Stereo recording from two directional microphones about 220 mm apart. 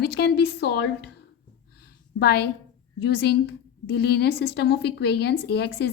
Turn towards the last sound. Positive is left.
turn(degrees=50)  # may be behind; listen again after turning